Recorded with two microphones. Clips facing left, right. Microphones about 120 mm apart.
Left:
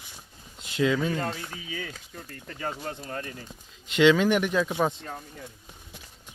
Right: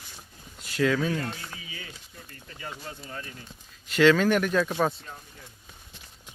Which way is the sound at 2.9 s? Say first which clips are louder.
Left 4 dB; 45° left (ahead or behind).